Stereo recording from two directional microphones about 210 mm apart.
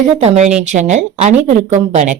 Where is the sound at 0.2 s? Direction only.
30° right (ahead or behind).